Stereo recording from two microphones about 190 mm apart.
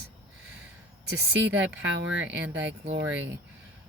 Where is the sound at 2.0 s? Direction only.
80° right.